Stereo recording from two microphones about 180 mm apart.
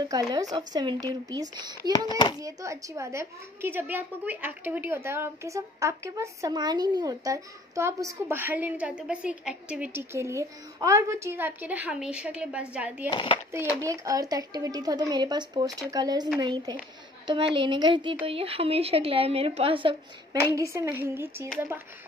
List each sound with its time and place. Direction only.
0.0 s speech: 20° right (ahead or behind)
2.0 s speech: 25° left (ahead or behind)
2.4 s a woman's voice: 15° right (ahead or behind)
13.1 s speech: 30° left (ahead or behind)
13.5 s a woman's voice: 15° right (ahead or behind)
20.3 s a woman's voice: 15° right (ahead or behind)